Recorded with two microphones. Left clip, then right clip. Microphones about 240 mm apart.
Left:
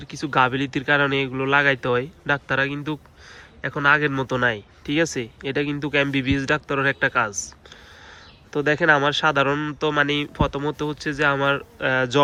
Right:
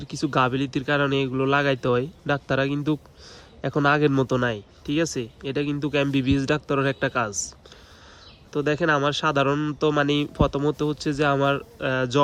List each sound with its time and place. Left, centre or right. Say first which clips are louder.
0.0 s speech: left 3 dB; centre
8.5 s speech: left 4 dB; centre